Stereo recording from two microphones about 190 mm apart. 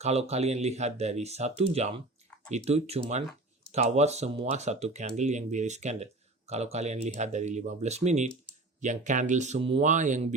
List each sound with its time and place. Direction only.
0.0 s speech: 35° right (ahead or behind)